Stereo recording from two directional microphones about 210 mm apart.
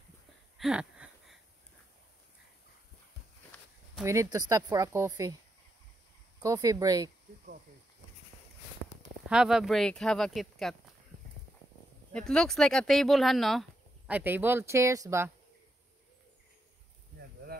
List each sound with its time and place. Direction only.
0.6 s a sound: 5° right (ahead or behind)
4.0 s speech: 15° right (ahead or behind)
6.4 s speech: 15° right (ahead or behind)
9.3 s speech: 5° right (ahead or behind)
12.1 s speech: 5° left (ahead or behind); by 15.3 s 15° right (ahead or behind)